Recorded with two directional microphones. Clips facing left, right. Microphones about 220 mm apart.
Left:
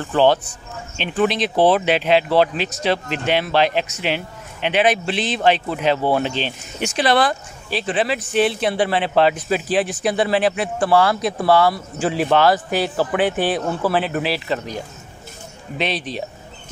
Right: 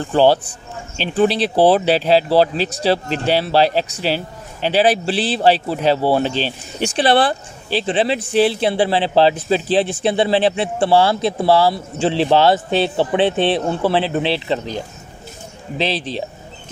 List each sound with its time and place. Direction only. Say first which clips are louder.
0.0 s speech: right 2 dB; 35° right (ahead or behind)
15.8 s speech: right 2 dB; 30° right (ahead or behind)